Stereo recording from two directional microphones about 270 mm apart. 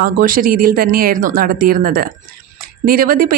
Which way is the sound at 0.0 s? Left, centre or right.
Right.